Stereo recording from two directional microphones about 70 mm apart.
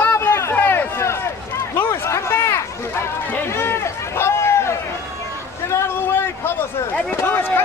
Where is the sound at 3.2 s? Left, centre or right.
Left.